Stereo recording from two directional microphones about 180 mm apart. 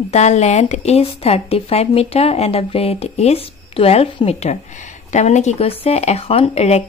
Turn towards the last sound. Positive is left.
turn(degrees=35)  # may be behind; listen again after turning